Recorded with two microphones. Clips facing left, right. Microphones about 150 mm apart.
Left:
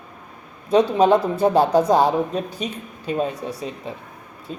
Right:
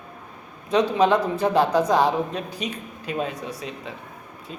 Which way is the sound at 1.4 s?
30° left (ahead or behind).